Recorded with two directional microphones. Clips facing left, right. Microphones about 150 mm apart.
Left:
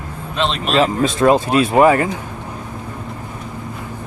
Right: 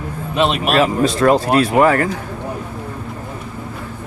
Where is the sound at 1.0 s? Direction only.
20° left (ahead or behind).